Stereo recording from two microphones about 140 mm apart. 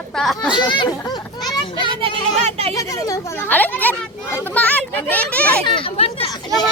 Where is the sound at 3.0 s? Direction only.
25° left (ahead or behind).